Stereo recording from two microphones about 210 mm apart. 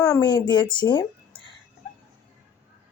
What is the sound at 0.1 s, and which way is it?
A woman's voice, 20° left (ahead or behind).